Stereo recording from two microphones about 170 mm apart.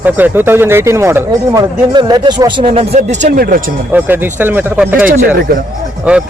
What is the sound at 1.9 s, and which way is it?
Speech, 25° right (ahead or behind).